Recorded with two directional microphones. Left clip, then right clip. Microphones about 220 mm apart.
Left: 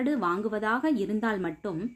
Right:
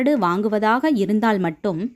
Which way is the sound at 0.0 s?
40° right (ahead or behind).